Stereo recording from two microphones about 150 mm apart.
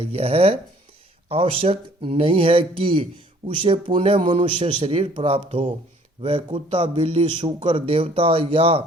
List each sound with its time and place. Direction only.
0.0 s speech: 40° right (ahead or behind)